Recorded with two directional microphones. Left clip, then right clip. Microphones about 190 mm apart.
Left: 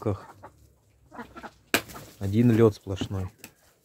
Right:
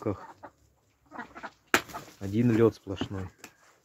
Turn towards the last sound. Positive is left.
turn(degrees=10)  # may be behind; listen again after turning